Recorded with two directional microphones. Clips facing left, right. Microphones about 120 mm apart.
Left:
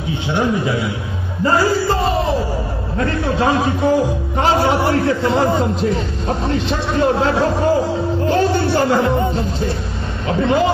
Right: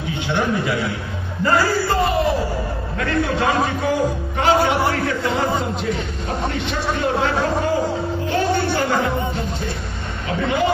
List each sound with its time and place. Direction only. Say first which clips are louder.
0.3 s a man's voice: left 3 dB; 30° left (ahead or behind)